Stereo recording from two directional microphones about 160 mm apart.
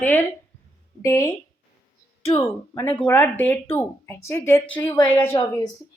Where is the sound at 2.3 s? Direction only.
20° left (ahead or behind).